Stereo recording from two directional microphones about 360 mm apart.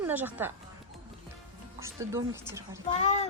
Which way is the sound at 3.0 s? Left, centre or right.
Centre.